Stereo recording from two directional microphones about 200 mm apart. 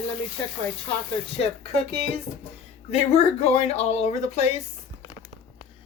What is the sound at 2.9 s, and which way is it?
Speech, 30° left (ahead or behind).